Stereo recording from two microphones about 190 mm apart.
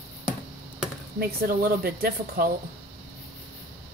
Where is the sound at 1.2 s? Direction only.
50° right (ahead or behind).